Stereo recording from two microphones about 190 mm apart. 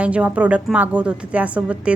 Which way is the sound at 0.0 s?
5° right (ahead or behind).